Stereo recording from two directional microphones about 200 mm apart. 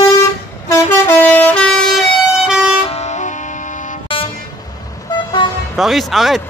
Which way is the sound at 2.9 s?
35° left (ahead or behind).